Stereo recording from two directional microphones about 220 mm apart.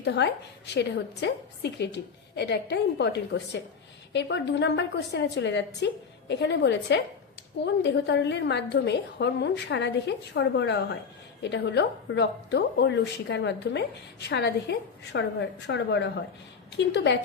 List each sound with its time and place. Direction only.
0.0 s a woman's voice: 50° left (ahead or behind)